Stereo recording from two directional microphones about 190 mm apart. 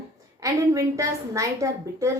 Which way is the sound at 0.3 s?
15° right (ahead or behind).